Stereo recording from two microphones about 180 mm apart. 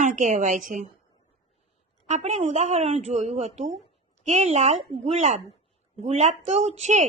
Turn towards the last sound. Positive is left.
turn(degrees=-40)  # may be behind; listen again after turning